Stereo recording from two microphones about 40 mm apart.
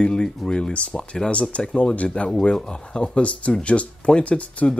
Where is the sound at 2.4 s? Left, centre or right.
Centre.